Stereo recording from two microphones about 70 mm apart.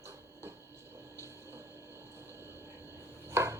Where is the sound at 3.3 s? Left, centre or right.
Right.